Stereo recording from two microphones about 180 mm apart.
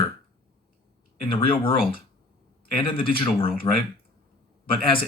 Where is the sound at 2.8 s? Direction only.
30° left (ahead or behind).